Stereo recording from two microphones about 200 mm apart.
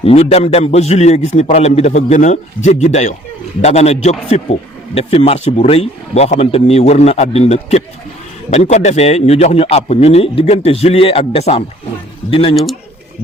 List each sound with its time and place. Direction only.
0.0 s a man's voice: 30° left (ahead or behind)